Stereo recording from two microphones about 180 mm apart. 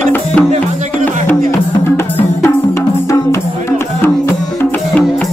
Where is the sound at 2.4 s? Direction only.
15° left (ahead or behind).